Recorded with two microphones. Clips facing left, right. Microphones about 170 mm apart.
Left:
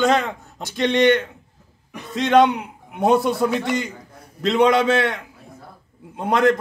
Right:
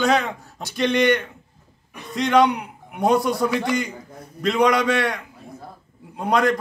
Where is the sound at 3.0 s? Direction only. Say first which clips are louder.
Left 2 dB; 25° left (ahead or behind).